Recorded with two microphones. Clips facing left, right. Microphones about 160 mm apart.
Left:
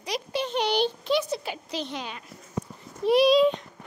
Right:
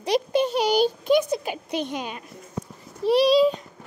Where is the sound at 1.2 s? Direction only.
15° right (ahead or behind).